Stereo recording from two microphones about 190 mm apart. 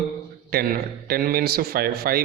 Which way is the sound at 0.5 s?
50° right (ahead or behind).